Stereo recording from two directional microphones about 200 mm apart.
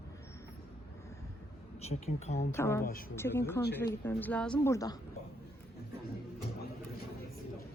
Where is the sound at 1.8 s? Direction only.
30° left (ahead or behind).